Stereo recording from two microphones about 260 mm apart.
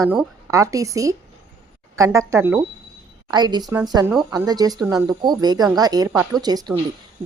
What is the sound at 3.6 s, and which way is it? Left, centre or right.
Speech, centre.